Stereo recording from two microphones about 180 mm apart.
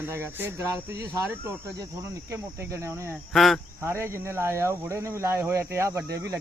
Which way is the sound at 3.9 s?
15° right (ahead or behind).